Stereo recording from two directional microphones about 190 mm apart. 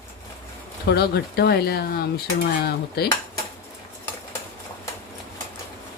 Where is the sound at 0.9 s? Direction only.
55° left (ahead or behind).